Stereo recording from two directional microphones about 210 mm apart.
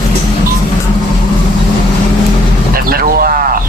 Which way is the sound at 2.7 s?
45° right (ahead or behind).